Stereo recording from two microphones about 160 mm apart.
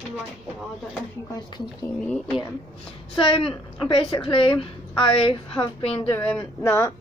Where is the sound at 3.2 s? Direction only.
35° left (ahead or behind).